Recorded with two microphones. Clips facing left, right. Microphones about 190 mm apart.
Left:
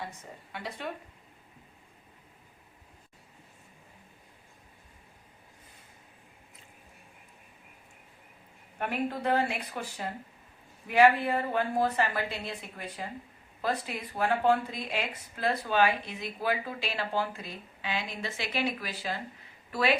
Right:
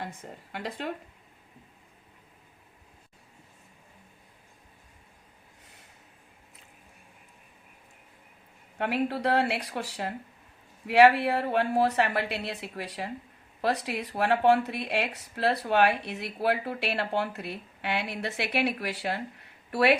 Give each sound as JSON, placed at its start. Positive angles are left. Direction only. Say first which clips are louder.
{"t": 0.0, "sound": "a woman's voice", "louder": "right 3 dB", "side_deg": -55}
{"t": 8.8, "sound": "a woman's voice", "louder": "right 3 dB", "side_deg": -75}